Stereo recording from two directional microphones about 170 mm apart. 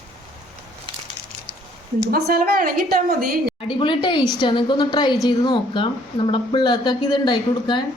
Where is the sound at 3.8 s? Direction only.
30° left (ahead or behind).